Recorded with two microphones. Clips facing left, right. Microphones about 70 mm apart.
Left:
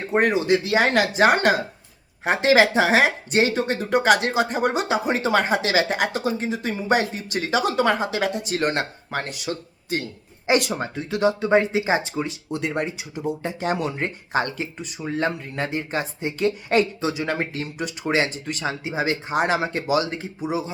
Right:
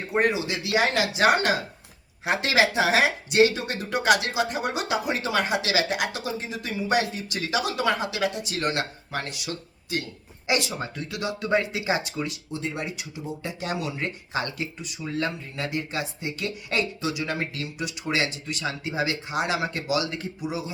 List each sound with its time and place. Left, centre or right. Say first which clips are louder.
0.3 s speech: left 6 dB; left
2.2 s speech: left 5 dB; left
10.6 s speech: left 4 dB; left
10.9 s speech: left 9 dB; left
12.5 s speech: left 6 dB; left
13.4 s speech: left 4 dB; left
18.7 s speech: left 3 dB; left
19.3 s speech: left 5 dB; left